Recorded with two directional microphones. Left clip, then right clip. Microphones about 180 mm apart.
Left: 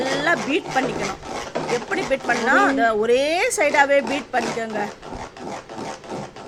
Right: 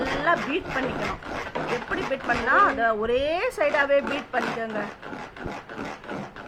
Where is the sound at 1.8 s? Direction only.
25° left (ahead or behind).